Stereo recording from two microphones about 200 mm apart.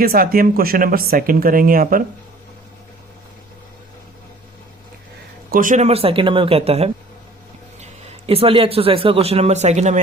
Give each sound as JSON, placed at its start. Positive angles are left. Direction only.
{"t": 0.0, "sound": "speech", "side_deg": -50}
{"t": 5.5, "sound": "speech", "side_deg": -40}